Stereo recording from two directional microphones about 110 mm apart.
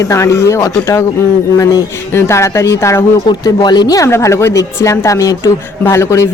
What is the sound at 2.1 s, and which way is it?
Speech, 25° left (ahead or behind).